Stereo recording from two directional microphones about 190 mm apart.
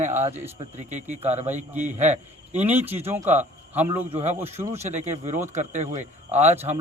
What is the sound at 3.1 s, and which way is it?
Speech, 35° right (ahead or behind).